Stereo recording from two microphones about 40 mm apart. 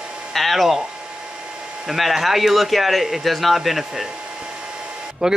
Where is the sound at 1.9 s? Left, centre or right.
Centre.